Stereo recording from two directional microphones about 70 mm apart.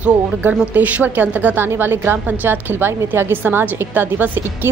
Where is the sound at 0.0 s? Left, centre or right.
Right.